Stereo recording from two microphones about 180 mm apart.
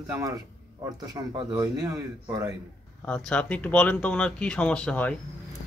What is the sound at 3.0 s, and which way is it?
Speech, 5° left (ahead or behind).